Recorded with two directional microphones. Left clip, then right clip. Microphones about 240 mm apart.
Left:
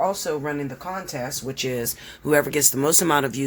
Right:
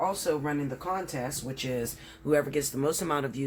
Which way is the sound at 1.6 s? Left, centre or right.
Left.